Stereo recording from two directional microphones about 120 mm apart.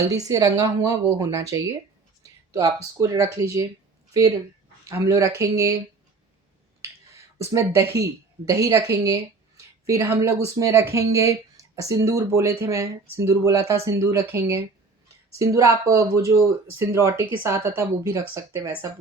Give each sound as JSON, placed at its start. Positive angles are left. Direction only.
{"t": 0.0, "sound": "speech", "side_deg": -30}
{"t": 4.9, "sound": "speech", "side_deg": -25}
{"t": 7.3, "sound": "a woman's voice", "side_deg": -25}